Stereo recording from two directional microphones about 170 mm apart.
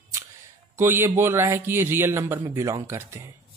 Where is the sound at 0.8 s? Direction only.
15° right (ahead or behind).